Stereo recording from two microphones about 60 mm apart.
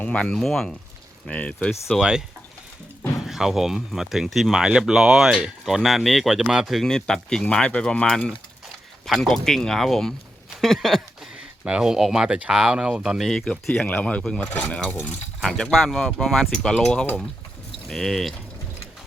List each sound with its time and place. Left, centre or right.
0.0 s speech: centre
1.3 s speech: left
2.0 s speech: centre
4.5 s speech: centre
6.8 s speech: centre
9.0 s speech: centre
10.5 s a sound: centre
11.3 s speech: centre
13.2 s speech: centre
14.0 s speech: centre
14.5 s speech: left
15.4 s speech: centre